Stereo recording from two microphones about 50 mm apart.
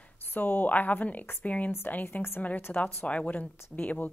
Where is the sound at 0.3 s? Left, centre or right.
Left.